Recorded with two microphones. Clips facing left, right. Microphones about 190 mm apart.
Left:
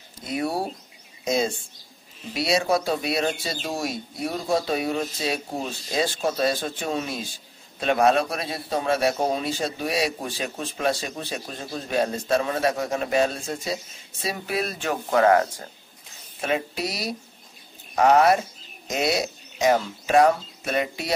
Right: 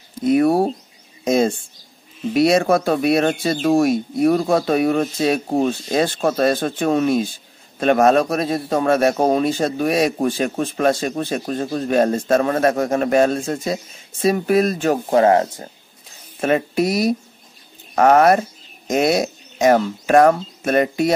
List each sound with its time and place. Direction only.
0.2 s speech: 55° right (ahead or behind); by 15.7 s 25° right (ahead or behind)
16.3 s speech: 50° right (ahead or behind)